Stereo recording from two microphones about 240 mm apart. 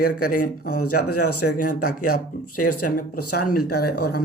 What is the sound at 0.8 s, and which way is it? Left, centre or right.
Speech, left.